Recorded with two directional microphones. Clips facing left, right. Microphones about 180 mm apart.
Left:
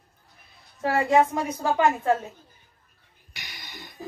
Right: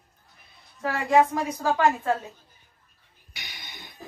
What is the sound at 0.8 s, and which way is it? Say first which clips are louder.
Speech: left 1 dB; 25° left (ahead or behind).